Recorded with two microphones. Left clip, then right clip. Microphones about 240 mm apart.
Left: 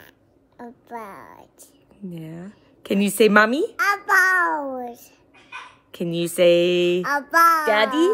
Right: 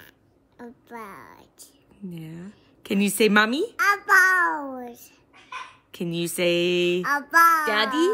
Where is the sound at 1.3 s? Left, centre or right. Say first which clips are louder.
Left 3 dB; centre.